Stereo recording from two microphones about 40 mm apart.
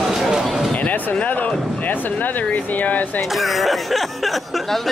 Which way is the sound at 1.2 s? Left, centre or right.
Left.